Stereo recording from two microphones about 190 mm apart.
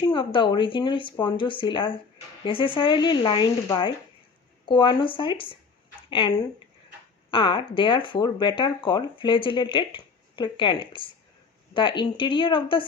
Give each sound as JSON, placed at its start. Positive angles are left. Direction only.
{"t": 0.0, "sound": "speech", "side_deg": 25}